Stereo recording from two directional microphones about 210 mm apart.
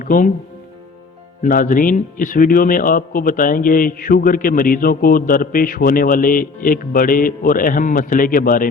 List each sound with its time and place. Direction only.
0.0 s speech: 40° left (ahead or behind)
1.4 s speech: 40° left (ahead or behind)